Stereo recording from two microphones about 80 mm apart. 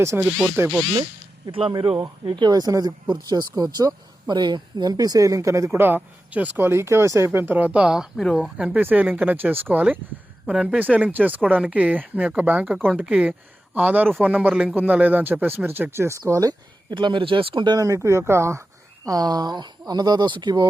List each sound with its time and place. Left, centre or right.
0.4 s speech: right
1.5 s speech: right
3.1 s speech: right
3.5 s speech: right
5.8 s speech: right
7.3 s speech: right; by 8.4 s centre
8.5 s speech: centre
10.4 s speech: centre
10.8 s speech: centre; by 16.6 s right
16.9 s speech: right
17.7 s speech: right
19.0 s speech: right